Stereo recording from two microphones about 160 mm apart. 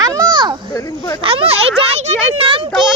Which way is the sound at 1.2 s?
35° right (ahead or behind).